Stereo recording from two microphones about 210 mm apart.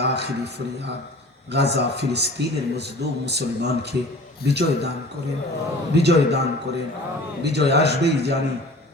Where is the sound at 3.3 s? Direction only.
55° right (ahead or behind).